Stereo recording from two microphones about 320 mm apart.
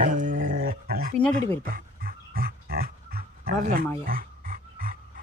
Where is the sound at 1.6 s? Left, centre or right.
Right.